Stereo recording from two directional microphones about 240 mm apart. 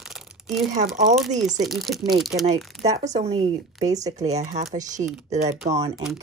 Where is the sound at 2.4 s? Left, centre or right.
Right.